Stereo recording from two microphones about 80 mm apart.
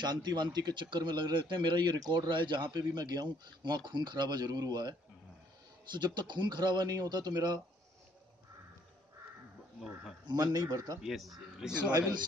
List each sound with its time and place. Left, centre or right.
0.0 s a man's voice: right
5.9 s speech: right
10.2 s speech: right
11.0 s speech: centre